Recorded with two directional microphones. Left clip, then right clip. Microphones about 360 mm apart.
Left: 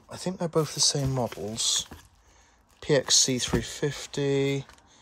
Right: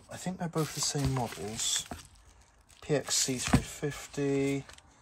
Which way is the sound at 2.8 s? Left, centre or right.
Left.